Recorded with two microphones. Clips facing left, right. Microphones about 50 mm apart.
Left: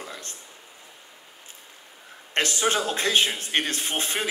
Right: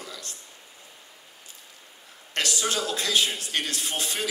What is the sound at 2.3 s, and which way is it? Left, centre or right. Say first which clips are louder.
A man's voice: left 4 dB; left.